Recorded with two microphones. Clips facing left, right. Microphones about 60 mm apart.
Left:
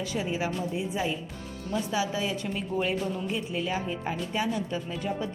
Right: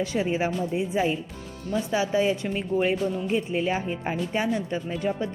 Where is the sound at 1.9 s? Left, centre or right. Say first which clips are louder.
Right 8 dB; right.